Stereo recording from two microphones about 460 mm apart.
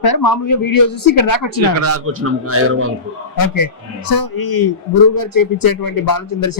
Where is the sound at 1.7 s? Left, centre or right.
Right.